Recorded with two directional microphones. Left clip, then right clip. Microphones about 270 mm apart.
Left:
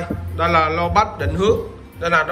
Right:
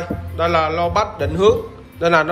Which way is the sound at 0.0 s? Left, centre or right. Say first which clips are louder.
Right 1 dB; centre.